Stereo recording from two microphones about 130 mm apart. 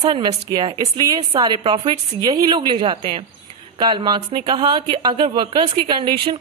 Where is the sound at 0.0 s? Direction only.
35° right (ahead or behind).